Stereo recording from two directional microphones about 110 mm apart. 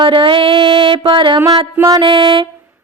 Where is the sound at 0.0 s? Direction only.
50° right (ahead or behind).